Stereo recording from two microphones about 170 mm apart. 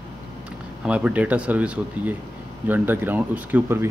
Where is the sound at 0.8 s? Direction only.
5° right (ahead or behind).